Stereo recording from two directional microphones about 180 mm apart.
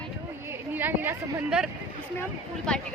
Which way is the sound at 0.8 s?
10° right (ahead or behind).